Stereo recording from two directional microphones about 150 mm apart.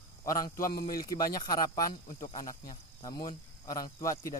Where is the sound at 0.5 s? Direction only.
70° left (ahead or behind).